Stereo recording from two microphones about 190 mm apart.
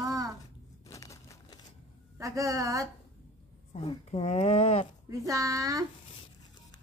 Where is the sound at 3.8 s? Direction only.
30° left (ahead or behind).